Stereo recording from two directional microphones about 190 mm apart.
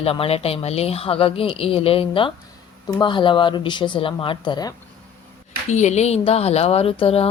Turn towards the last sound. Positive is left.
turn(degrees=30)  # may be behind; listen again after turning